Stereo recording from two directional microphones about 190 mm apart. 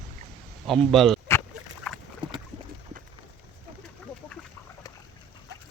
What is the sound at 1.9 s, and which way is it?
Boat, centre (ahead or behind).